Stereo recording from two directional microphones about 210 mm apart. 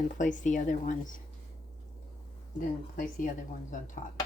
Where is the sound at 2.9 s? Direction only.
40° left (ahead or behind).